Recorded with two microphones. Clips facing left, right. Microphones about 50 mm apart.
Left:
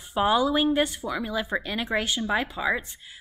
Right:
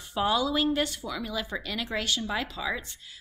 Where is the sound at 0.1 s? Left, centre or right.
Left.